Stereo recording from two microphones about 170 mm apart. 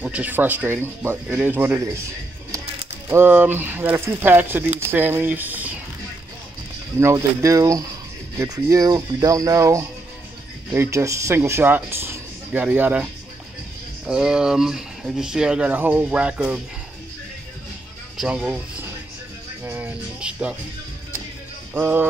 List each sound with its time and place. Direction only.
0.0 s speech: 10° right (ahead or behind)
3.1 s speech: 10° right (ahead or behind)
7.0 s speech: 15° right (ahead or behind)
18.1 s speech: 5° right (ahead or behind)
19.6 s music: 10° right (ahead or behind)
21.7 s speech: 10° right (ahead or behind)